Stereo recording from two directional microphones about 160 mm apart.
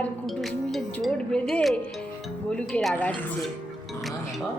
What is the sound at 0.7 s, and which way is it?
Speech, centre (ahead or behind).